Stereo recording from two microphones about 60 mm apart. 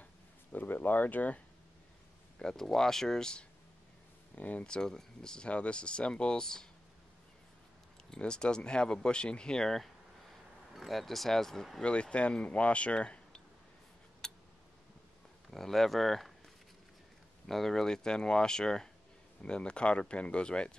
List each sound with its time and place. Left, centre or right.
0.5 s speech: left
2.3 s speech: centre
4.4 s speech: left
8.1 s speech: centre
11.8 s speech: centre
14.2 s tick: centre
15.5 s speech: centre
17.5 s speech: centre